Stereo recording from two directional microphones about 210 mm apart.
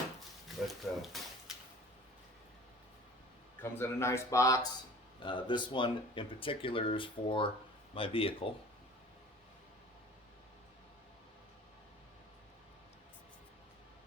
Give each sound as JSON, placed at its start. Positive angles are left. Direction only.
{"t": 0.7, "sound": "speech", "side_deg": 0}
{"t": 3.6, "sound": "speech", "side_deg": 10}